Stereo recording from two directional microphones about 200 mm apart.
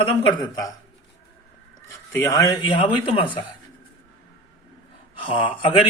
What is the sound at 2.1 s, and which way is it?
A man's voice, 15° left (ahead or behind).